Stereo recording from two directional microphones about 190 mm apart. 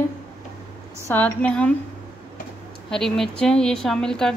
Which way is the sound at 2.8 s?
Centre (ahead or behind).